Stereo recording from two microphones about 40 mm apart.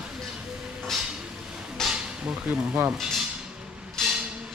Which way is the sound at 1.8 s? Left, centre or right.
Centre.